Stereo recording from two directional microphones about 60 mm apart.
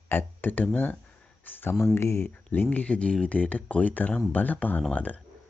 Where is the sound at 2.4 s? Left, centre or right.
Left.